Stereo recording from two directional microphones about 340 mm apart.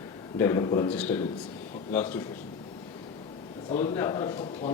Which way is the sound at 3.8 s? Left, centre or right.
Centre.